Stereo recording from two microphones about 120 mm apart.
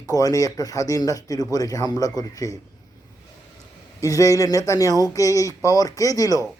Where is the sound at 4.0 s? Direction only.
30° left (ahead or behind).